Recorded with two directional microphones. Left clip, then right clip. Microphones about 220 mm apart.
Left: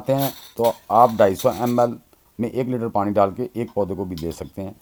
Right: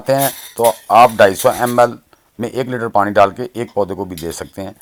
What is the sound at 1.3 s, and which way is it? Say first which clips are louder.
Speech: right 6 dB; 15° right (ahead or behind).